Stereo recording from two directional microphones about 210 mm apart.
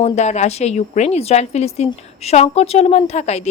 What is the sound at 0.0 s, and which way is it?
A woman's voice, 30° left (ahead or behind).